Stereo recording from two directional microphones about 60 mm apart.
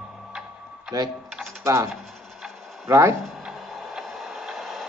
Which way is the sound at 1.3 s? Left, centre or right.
Centre.